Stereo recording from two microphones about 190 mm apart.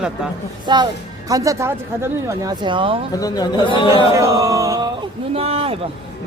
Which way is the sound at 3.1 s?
20° left (ahead or behind).